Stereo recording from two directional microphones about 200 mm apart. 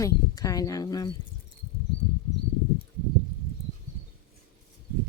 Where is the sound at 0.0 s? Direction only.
15° left (ahead or behind).